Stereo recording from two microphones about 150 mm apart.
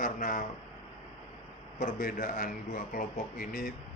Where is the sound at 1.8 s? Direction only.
60° left (ahead or behind).